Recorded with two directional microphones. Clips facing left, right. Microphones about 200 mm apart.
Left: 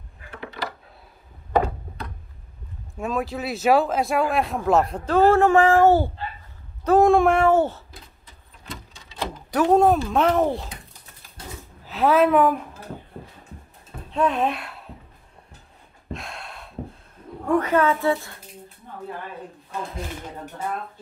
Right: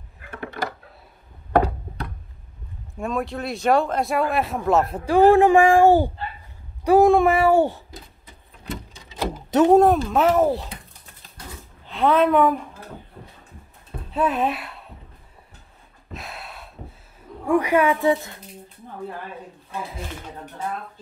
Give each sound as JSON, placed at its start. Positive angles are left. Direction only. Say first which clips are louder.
{"t": 0.3, "sound": "a sound", "louder": "right 3 dB", "side_deg": -50}
{"t": 1.5, "sound": "a sound", "louder": "right 2 dB", "side_deg": -60}
{"t": 3.0, "sound": "speech", "louder": "even", "side_deg": 0}
{"t": 9.8, "sound": "speech", "louder": "right 2 dB", "side_deg": 0}
{"t": 11.8, "sound": "a woman's voice", "louder": "even", "side_deg": 5}
{"t": 14.1, "sound": "speech", "louder": "even", "side_deg": -5}
{"t": 16.1, "sound": "gasp", "louder": "left 2 dB", "side_deg": -5}
{"t": 17.5, "sound": "speech", "louder": "right 1 dB", "side_deg": -10}